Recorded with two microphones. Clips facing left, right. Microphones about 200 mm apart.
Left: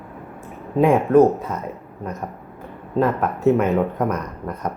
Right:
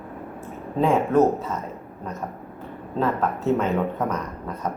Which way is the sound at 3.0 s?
15° left (ahead or behind).